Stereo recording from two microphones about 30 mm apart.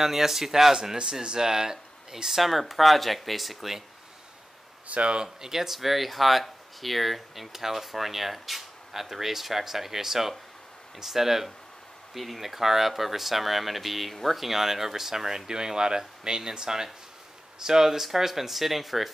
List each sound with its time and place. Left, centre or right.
0.0 s speech: centre
1.2 s speech: right
2.4 s speech: centre
4.8 s speech: right
5.2 s speech: centre